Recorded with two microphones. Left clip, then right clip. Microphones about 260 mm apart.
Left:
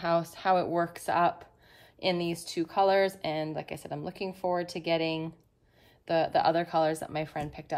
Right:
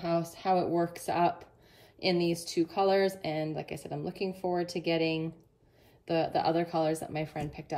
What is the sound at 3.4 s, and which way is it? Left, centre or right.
Speech, left.